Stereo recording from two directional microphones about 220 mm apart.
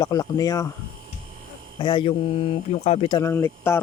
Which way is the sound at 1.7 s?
20° left (ahead or behind).